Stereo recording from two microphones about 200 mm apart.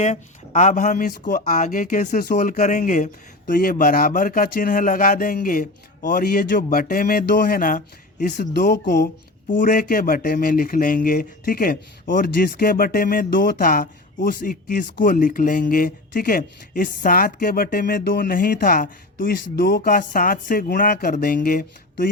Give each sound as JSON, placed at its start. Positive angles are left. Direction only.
{"t": 0.0, "sound": "speech", "side_deg": 35}